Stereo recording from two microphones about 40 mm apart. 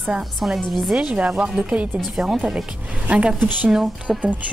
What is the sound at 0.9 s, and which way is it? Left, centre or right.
Speech, right.